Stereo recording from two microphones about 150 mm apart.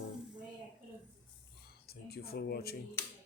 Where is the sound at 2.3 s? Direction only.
90° left.